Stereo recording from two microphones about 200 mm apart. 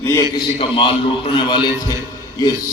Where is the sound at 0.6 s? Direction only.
25° left (ahead or behind).